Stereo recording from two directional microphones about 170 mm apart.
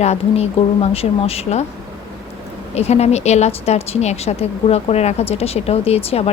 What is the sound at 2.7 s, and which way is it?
A woman's voice, 40° left (ahead or behind).